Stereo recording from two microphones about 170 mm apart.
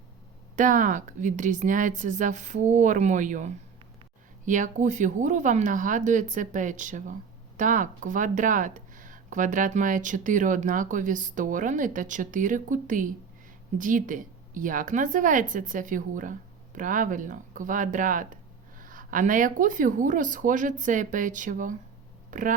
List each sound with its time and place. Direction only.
0.5 s speech: 50° right (ahead or behind)